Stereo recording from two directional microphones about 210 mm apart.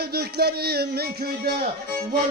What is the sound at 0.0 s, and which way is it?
Music, 50° right (ahead or behind).